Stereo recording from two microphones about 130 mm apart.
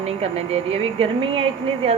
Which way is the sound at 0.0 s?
55° right (ahead or behind).